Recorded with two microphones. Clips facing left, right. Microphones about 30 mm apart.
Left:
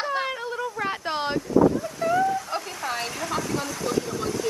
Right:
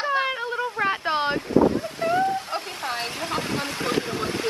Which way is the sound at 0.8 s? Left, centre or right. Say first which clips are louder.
Right 5 dB; centre.